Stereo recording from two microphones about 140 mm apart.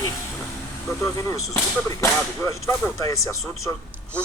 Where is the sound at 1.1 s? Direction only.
20° left (ahead or behind).